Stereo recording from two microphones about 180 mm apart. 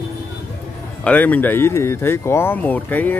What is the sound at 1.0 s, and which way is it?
Speech, 10° left (ahead or behind).